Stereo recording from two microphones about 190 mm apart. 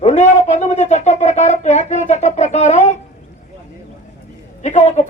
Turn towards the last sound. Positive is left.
turn(degrees=40)  # may be behind; listen again after turning